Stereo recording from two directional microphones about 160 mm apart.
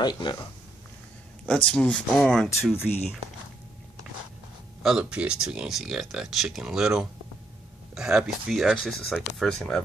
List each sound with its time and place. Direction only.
0.0 s speech: 30° left (ahead or behind)
1.5 s speech: 5° left (ahead or behind)
2.7 s speech: 15° left (ahead or behind)
4.8 s speech: 5° right (ahead or behind)